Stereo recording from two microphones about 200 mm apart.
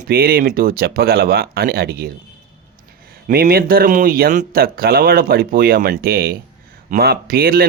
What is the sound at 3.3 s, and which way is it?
Speech, 50° right (ahead or behind).